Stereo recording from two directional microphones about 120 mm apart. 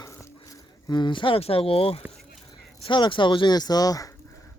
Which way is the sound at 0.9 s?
40° left (ahead or behind).